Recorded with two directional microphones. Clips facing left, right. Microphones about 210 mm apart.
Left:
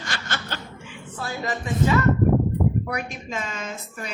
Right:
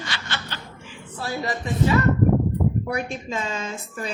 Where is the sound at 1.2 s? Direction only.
35° right (ahead or behind).